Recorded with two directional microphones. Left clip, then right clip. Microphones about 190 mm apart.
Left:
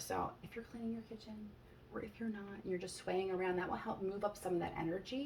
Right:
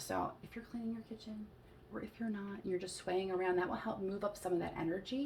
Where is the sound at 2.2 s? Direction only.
35° right (ahead or behind).